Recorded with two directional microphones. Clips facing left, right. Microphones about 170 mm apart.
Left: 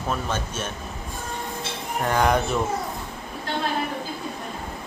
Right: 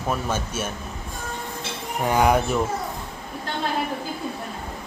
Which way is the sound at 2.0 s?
10° right (ahead or behind).